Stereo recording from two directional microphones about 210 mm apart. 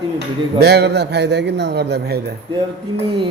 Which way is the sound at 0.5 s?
50° right (ahead or behind).